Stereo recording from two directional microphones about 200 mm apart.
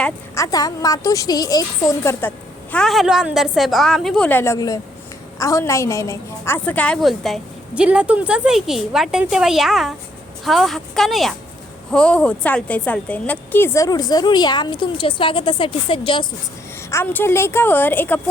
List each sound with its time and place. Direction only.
0.0 s a woman's voice: 15° left (ahead or behind)
2.7 s a woman's voice: centre (ahead or behind); by 16.2 s 25° left (ahead or behind)
16.9 s a woman's voice: 10° left (ahead or behind)